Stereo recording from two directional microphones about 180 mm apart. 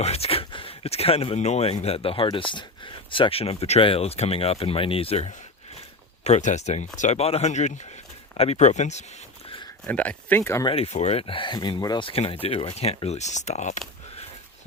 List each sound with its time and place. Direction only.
0.0 s speech: 35° left (ahead or behind)
9.8 s speech: 5° left (ahead or behind)
10.7 s speech: 35° left (ahead or behind)